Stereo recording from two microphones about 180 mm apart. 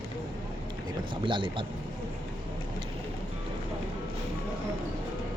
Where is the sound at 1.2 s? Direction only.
25° right (ahead or behind).